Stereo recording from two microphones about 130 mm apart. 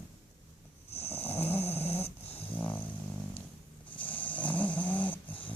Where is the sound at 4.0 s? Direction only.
40° left (ahead or behind).